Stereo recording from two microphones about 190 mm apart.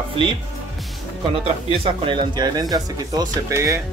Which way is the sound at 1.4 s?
30° right (ahead or behind).